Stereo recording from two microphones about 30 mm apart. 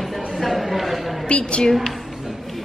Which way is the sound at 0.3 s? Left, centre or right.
Centre.